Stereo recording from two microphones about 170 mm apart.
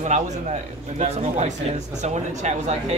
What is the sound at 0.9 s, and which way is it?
Speech, 40° right (ahead or behind).